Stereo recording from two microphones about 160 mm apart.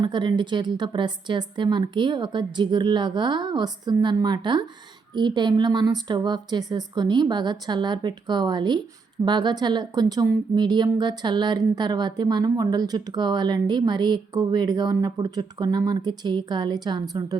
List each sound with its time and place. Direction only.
0.0 s a woman's voice: 30° right (ahead or behind)